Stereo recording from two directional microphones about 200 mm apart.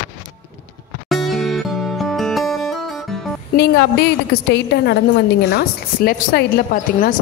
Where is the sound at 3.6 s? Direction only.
55° left (ahead or behind).